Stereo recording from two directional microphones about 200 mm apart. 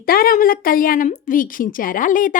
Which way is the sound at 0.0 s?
45° left (ahead or behind).